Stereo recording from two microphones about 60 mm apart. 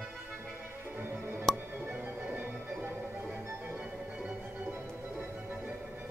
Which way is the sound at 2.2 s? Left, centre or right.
Right.